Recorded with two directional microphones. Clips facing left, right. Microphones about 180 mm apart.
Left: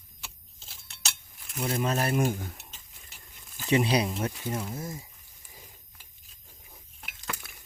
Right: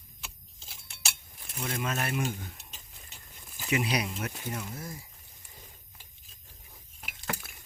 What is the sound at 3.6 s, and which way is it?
Speech, 30° left (ahead or behind).